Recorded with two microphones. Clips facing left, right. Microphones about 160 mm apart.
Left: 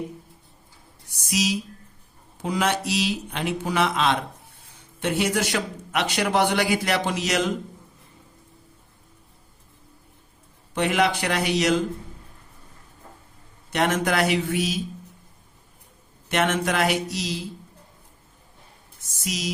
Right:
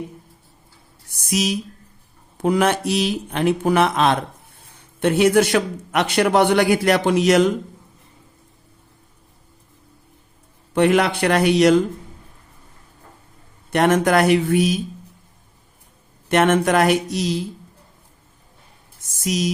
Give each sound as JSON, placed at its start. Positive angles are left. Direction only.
{"t": 1.3, "sound": "a man's voice", "side_deg": -55}
{"t": 10.8, "sound": "a man's voice", "side_deg": -55}
{"t": 13.7, "sound": "speech", "side_deg": -55}
{"t": 16.3, "sound": "speech", "side_deg": -50}
{"t": 19.1, "sound": "speech", "side_deg": -50}